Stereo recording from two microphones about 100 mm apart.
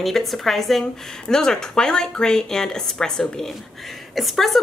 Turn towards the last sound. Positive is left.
turn(degrees=0)  # may be behind; listen again after turning